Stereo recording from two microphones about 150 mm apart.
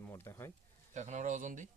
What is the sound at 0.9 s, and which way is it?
Speech, 50° right (ahead or behind).